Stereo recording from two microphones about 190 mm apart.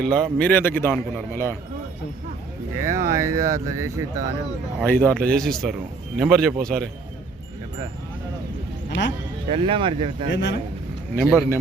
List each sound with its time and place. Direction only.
0.0 s a man's voice: 5° left (ahead or behind)
2.7 s speech: 15° right (ahead or behind)
4.8 s a man's voice: 10° left (ahead or behind)
9.5 s speech: 30° right (ahead or behind)
10.2 s speech: 65° left (ahead or behind)
11.2 s a man's voice: 10° left (ahead or behind)